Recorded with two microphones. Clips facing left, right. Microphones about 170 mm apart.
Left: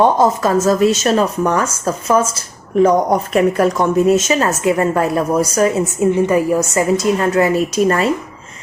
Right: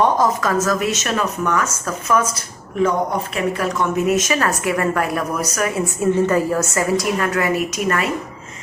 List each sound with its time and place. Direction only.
0.0 s a woman's voice: 30° left (ahead or behind)
2.8 s a woman's voice: 45° left (ahead or behind)